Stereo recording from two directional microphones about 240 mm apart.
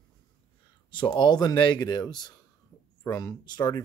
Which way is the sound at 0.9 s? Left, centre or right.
Centre.